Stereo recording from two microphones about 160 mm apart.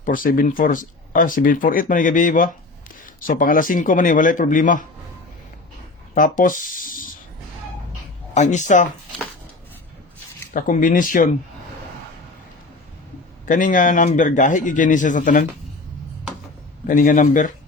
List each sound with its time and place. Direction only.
0.0 s speech: 60° left (ahead or behind)
6.1 s speech: 55° left (ahead or behind)
8.4 s a man's voice: 50° left (ahead or behind)
10.5 s speech: 55° left (ahead or behind)
13.4 s a man's voice: 55° left (ahead or behind)
16.8 s a man's voice: 55° left (ahead or behind)